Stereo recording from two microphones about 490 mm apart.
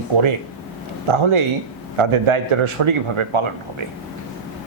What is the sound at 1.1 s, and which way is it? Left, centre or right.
A man's voice, right.